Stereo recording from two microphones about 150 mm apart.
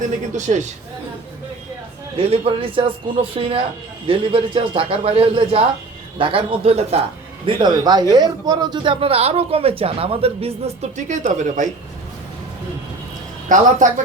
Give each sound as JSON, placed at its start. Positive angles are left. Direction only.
{"t": 0.3, "sound": "a man's voice", "side_deg": -55}
{"t": 2.1, "sound": "speech", "side_deg": -40}
{"t": 7.4, "sound": "a man's voice", "side_deg": -30}
{"t": 13.5, "sound": "speech", "side_deg": -55}